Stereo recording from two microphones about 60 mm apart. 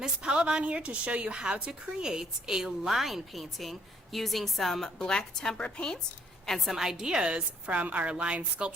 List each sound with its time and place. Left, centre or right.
0.0 s a woman's voice: centre
6.7 s a woman's voice: centre